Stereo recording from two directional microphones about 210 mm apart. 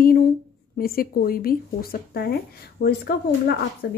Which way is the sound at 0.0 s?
45° left (ahead or behind).